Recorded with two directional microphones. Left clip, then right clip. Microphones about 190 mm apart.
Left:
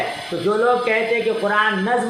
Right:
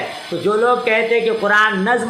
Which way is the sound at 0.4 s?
25° right (ahead or behind).